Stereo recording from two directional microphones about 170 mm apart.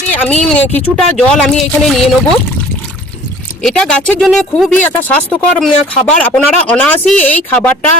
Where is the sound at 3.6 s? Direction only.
5° left (ahead or behind).